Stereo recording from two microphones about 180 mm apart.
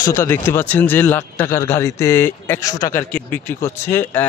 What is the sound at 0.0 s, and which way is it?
A man's voice, 15° left (ahead or behind).